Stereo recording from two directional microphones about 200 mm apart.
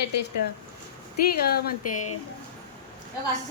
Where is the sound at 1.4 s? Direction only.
50° left (ahead or behind).